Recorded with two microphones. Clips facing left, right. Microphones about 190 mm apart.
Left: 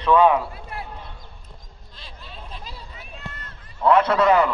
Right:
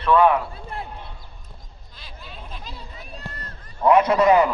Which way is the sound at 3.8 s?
15° right (ahead or behind).